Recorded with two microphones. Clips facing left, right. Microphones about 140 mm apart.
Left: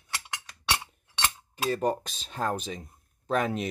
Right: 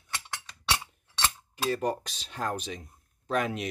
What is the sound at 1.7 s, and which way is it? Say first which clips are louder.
Speech: left 2 dB; 35° left (ahead or behind).